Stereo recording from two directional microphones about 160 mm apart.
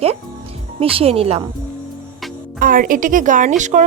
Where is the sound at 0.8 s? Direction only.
35° right (ahead or behind).